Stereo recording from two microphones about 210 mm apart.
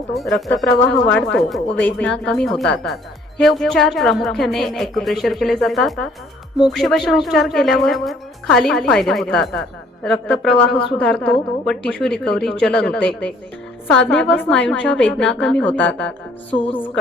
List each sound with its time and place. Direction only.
0.2 s speech: centre (ahead or behind)
16.5 s a woman's voice: 25° left (ahead or behind)
16.7 s a woman's voice: 10° left (ahead or behind)